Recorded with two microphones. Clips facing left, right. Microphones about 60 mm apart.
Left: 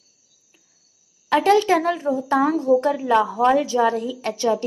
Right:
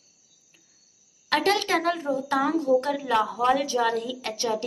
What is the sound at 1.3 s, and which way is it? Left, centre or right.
A woman's voice, left.